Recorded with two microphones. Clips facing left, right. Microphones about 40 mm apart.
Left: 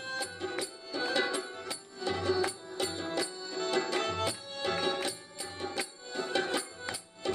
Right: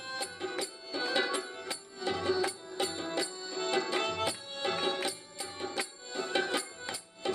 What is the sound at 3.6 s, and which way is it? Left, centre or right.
Music, centre.